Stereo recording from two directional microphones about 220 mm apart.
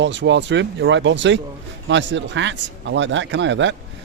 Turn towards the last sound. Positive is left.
turn(degrees=-55)  # may be behind; listen again after turning